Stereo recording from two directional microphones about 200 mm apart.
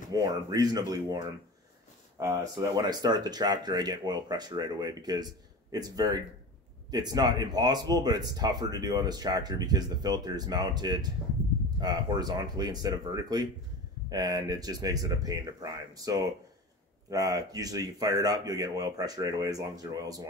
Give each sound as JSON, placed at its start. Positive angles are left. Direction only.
{"t": 0.1, "sound": "speech", "side_deg": -20}